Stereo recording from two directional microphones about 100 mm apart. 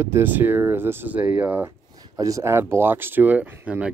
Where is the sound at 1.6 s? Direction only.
35° right (ahead or behind); by 3.9 s 15° right (ahead or behind).